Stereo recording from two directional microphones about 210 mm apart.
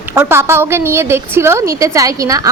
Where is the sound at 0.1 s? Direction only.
10° right (ahead or behind).